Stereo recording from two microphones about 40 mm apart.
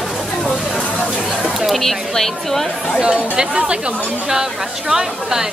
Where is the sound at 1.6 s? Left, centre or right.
Centre.